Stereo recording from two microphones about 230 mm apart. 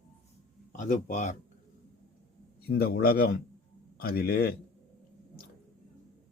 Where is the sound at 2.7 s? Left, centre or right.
Left.